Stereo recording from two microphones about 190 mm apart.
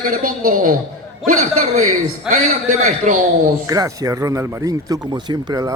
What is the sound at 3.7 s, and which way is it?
Speech, 20° right (ahead or behind).